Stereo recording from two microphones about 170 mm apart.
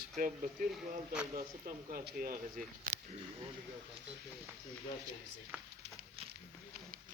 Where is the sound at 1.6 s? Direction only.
55° right (ahead or behind).